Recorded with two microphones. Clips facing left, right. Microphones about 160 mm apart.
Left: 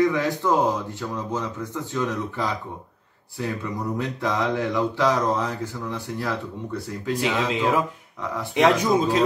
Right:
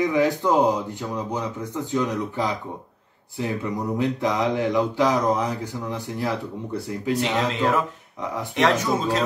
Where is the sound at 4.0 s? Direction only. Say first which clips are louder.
Right 3 dB; 15° right (ahead or behind).